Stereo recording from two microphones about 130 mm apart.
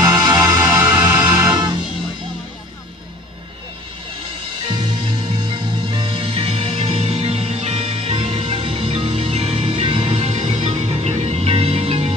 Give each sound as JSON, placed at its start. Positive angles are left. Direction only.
{"t": 0.0, "sound": "music", "side_deg": -25}
{"t": 0.7, "sound": "music", "side_deg": -15}
{"t": 4.6, "sound": "music", "side_deg": -35}